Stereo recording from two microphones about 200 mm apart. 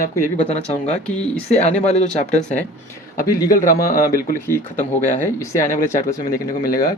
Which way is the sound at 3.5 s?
45° left (ahead or behind).